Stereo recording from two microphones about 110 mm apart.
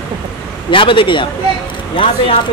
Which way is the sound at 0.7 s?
50° left (ahead or behind).